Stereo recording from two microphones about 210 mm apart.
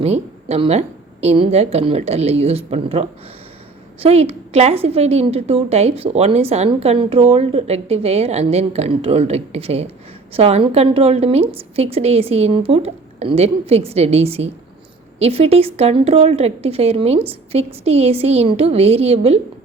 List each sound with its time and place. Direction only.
0.0 s a woman's voice: 30° right (ahead or behind)